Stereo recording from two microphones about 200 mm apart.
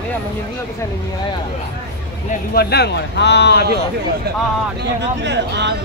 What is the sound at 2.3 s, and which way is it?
Speech, 50° left (ahead or behind).